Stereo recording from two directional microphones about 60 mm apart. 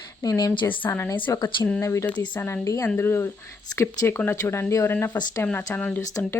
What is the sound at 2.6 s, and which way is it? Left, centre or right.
Speech, left.